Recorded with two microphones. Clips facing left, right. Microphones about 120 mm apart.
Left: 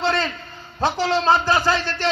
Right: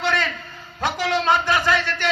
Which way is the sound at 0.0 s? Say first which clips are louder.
Left 1 dB; 30° left (ahead or behind).